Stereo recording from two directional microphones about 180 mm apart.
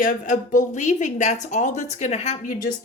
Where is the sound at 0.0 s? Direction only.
50° left (ahead or behind).